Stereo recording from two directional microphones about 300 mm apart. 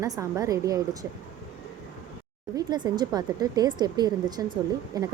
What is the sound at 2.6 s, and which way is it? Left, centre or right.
A woman's voice, centre.